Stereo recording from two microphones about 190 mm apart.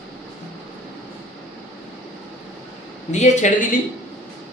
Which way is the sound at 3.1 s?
40° left (ahead or behind).